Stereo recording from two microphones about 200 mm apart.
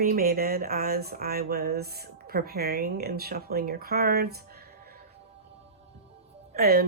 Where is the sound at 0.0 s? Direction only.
45° right (ahead or behind).